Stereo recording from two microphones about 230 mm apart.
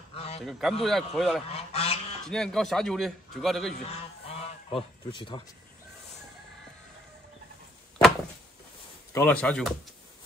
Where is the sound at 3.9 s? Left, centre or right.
Left.